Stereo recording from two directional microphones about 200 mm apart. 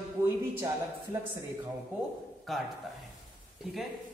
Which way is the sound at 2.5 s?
Centre (ahead or behind).